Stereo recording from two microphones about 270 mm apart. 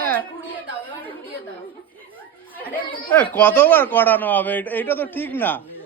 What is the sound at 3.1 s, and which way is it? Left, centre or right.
A man's voice, centre.